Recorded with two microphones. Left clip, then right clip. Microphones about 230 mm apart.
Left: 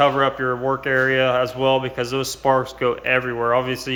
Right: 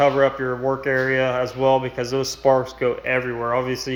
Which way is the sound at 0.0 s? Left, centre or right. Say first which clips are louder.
Even; centre.